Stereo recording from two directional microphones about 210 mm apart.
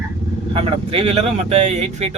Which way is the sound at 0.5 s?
30° right (ahead or behind).